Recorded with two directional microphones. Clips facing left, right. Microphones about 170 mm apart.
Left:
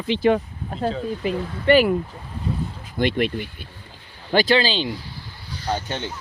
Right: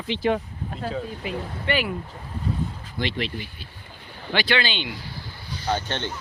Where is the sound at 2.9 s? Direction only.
50° left (ahead or behind).